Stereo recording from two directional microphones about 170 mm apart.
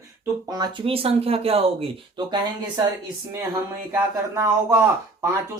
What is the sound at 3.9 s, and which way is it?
Speech, 15° right (ahead or behind).